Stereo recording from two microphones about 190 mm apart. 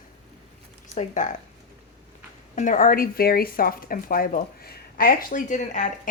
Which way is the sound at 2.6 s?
45° left (ahead or behind).